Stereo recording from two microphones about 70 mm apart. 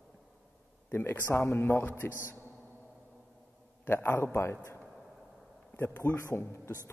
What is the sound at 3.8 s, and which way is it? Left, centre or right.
Speech, left.